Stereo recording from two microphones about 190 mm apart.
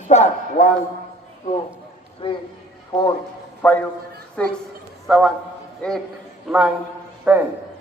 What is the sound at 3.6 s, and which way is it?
A man's voice, 10° left (ahead or behind).